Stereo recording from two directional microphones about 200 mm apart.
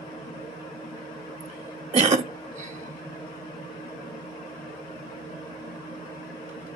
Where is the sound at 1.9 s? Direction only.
35° right (ahead or behind).